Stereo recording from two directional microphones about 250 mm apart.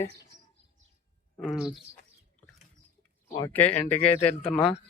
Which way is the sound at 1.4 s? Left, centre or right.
Centre.